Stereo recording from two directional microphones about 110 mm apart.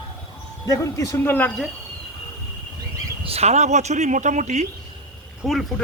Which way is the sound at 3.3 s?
75° right (ahead or behind).